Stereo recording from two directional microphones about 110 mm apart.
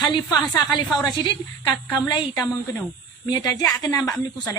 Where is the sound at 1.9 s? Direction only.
40° left (ahead or behind).